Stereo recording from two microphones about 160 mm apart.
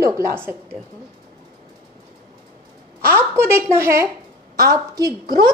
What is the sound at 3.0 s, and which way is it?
A woman's voice, 15° right (ahead or behind).